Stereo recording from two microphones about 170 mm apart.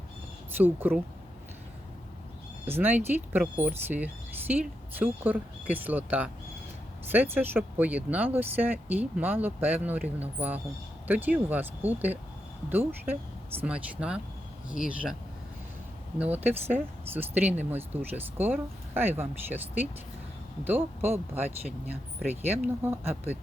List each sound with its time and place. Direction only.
0.5 s speech: 10° right (ahead or behind)
2.6 s speech: 10° right (ahead or behind)
13.6 s speech: 10° right (ahead or behind)
16.1 s speech: 10° right (ahead or behind)